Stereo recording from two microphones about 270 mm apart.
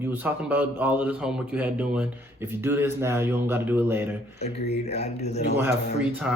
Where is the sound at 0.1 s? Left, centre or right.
Centre.